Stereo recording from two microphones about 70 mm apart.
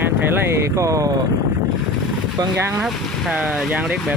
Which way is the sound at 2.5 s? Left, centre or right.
Right.